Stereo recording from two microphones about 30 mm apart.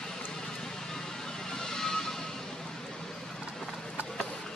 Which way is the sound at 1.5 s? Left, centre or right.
Centre.